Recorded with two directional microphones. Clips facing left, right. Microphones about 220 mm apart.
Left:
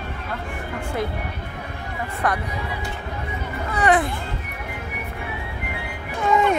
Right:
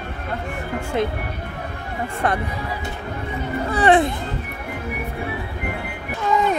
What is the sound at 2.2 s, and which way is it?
Speech, 25° right (ahead or behind).